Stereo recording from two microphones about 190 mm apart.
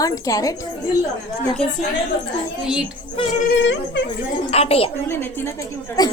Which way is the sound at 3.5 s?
65° left (ahead or behind).